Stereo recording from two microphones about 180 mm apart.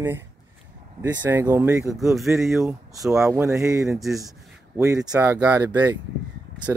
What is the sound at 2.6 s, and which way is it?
Speech, 15° right (ahead or behind).